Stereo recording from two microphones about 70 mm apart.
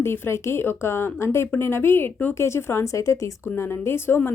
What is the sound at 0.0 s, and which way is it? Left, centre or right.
Speech, left.